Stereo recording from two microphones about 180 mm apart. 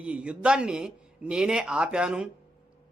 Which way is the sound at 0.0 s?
5° right (ahead or behind).